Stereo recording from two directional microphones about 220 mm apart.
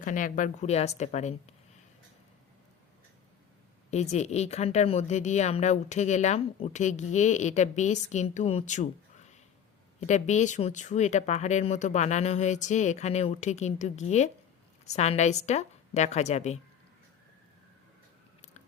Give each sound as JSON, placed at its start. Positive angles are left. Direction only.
{"t": 0.0, "sound": "a woman's voice", "side_deg": 35}
{"t": 3.9, "sound": "a woman's voice", "side_deg": 30}